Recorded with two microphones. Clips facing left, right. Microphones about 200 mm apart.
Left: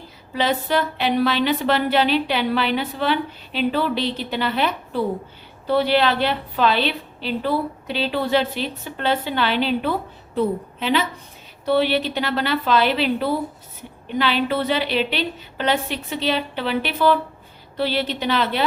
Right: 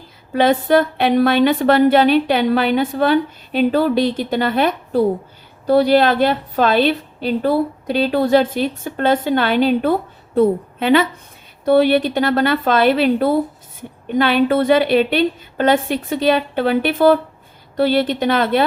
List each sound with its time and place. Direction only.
0.3 s a woman's voice: 50° right (ahead or behind)